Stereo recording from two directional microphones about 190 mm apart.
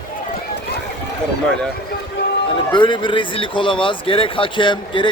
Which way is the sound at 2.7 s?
25° left (ahead or behind).